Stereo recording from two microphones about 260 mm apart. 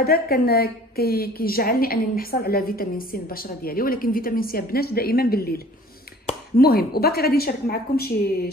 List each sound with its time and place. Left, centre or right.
0.0 s a woman's voice: left